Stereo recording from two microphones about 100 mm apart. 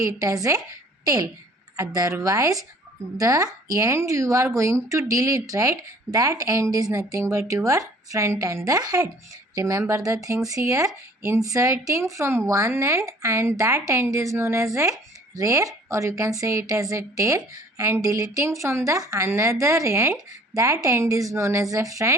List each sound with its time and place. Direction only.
0.0 s speech: 35° right (ahead or behind)
1.7 s speech: 40° right (ahead or behind)